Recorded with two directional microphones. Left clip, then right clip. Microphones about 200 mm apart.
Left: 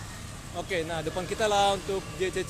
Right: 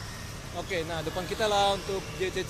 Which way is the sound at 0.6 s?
20° left (ahead or behind).